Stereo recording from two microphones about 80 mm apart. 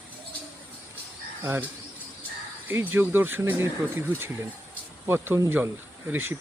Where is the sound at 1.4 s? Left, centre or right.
Right.